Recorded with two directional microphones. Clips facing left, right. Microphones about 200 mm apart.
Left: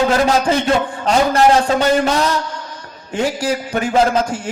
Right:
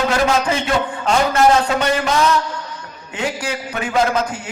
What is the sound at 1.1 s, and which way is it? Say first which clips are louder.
A man's voice: left 2 dB; 30° left (ahead or behind).